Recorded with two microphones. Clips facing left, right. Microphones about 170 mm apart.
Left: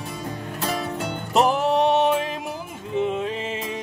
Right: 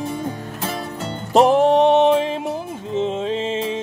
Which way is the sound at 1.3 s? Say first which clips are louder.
Right 6 dB; 35° right (ahead or behind).